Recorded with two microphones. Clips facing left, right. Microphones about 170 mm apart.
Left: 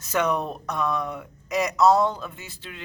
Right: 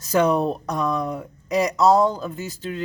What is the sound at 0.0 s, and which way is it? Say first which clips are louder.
Speech: right 6 dB; 35° right (ahead or behind).